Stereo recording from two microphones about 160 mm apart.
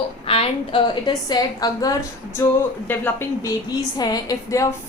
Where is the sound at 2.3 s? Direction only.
15° left (ahead or behind).